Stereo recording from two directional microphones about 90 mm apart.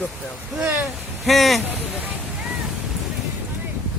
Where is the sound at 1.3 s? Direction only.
Centre (ahead or behind).